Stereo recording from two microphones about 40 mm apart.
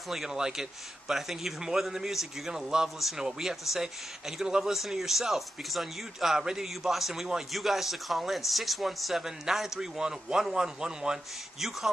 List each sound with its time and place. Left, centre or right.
0.3 s speech: centre